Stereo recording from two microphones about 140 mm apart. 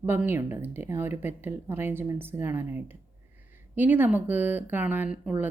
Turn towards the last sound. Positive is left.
turn(degrees=-10)  # may be behind; listen again after turning